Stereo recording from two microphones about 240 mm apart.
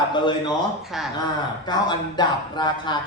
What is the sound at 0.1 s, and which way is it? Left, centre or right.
Speech, centre.